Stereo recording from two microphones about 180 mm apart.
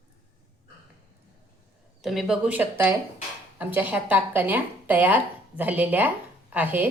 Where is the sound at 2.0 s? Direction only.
Centre (ahead or behind).